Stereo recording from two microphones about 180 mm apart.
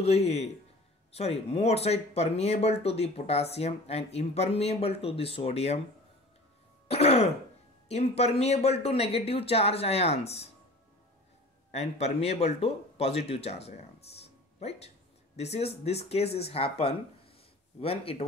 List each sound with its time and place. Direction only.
0.0 s speech: 35° left (ahead or behind)
6.9 s throat clearing: 35° left (ahead or behind)
8.2 s speech: 35° left (ahead or behind)
11.7 s speech: 35° left (ahead or behind)